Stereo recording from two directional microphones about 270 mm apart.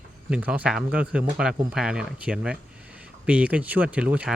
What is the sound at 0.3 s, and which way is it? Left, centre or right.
Speech, centre.